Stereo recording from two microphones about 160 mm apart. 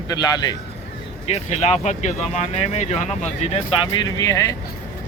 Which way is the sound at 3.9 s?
20° left (ahead or behind).